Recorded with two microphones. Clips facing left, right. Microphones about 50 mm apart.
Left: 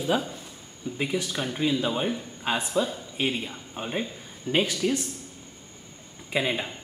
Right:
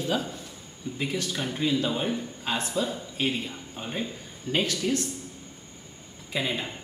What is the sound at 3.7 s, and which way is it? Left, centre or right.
Speech, centre.